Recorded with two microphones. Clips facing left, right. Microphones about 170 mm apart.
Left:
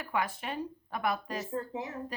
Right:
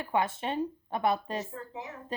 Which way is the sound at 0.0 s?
25° right (ahead or behind).